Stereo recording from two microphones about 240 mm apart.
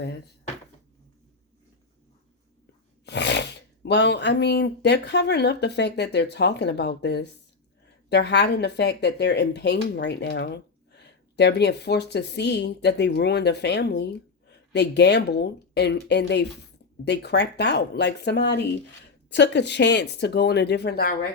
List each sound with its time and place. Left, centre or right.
3.1 s speech: left